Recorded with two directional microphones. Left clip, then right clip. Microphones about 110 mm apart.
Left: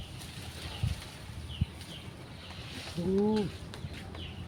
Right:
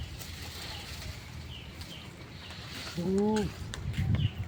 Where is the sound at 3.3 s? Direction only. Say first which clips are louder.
Right 1 dB; 80° right.